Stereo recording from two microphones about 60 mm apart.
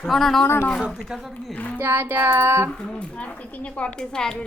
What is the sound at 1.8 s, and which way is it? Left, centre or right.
Child singing, right.